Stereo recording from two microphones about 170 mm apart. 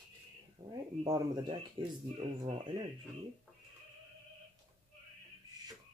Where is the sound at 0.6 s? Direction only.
30° right (ahead or behind).